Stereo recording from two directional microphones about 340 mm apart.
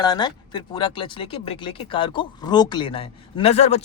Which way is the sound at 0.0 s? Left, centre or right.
Centre.